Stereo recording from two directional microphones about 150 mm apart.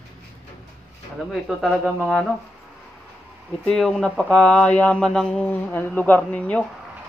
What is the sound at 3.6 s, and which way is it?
Speech, 5° left (ahead or behind).